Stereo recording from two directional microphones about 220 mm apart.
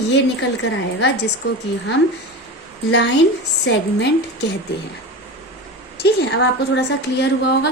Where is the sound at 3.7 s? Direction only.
50° left (ahead or behind).